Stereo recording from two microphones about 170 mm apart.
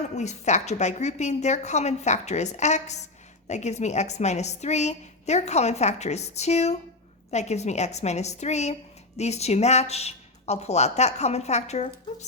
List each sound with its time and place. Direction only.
0.0 s a woman's voice: 40° left (ahead or behind)